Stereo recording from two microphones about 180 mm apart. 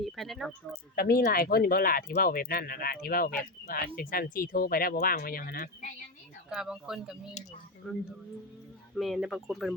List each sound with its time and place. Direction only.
0.0 s a sound: centre (ahead or behind)
0.9 s speech: 60° left (ahead or behind)
6.5 s speech: 5° right (ahead or behind)